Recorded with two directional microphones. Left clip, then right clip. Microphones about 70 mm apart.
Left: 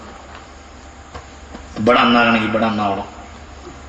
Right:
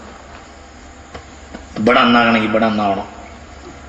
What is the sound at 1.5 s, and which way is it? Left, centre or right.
A man's voice, right.